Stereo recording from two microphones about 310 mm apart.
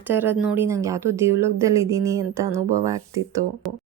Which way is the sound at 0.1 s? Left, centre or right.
Centre.